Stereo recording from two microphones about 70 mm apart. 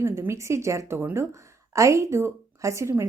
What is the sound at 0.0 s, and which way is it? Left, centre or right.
Speech, right.